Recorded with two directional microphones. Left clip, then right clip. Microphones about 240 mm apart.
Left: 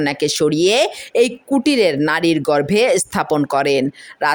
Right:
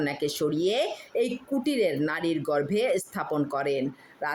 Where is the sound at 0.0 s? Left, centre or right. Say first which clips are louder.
Left 11 dB; left.